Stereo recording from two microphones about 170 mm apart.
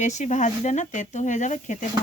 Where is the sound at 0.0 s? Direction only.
45° left (ahead or behind).